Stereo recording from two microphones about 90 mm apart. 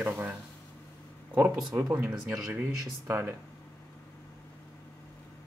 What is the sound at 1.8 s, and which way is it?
Speech, 15° right (ahead or behind).